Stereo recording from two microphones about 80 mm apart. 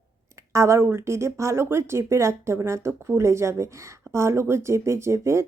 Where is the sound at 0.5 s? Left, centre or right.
Right.